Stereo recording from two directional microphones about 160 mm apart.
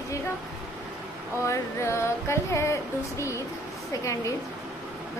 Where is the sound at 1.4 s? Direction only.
15° left (ahead or behind).